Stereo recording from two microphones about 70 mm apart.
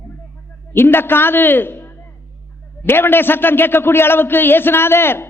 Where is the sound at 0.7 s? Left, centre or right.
Left.